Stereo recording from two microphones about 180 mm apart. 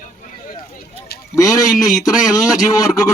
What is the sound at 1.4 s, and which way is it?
A man's voice, 20° left (ahead or behind).